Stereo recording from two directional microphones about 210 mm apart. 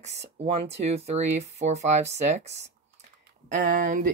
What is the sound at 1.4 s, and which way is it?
Speech, 30° right (ahead or behind).